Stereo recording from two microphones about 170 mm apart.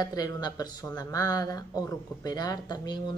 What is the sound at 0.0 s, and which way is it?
Speech, 20° left (ahead or behind).